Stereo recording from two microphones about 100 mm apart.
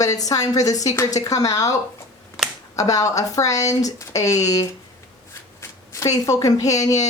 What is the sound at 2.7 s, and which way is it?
Speech, 35° left (ahead or behind).